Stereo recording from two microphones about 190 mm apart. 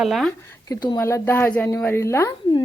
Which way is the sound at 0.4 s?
20° left (ahead or behind).